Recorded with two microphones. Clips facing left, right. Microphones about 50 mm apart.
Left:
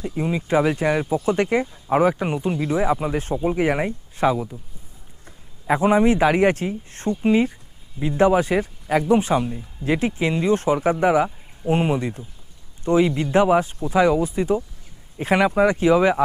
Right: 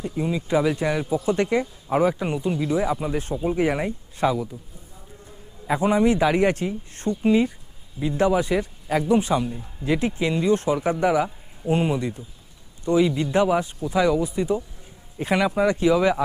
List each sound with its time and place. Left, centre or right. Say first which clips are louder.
0.0 s a man's voice: left 1 dB; centre
2.2 s a man's voice: left 1 dB; left
5.6 s a man's voice: left 3 dB; left
7.2 s a man's voice: left 1 dB; left
10.5 s a man's voice: left 2 dB; left
15.4 s a man's voice: left 2 dB; left